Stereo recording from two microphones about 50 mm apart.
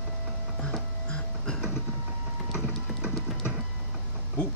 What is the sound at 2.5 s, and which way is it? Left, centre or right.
Music, centre.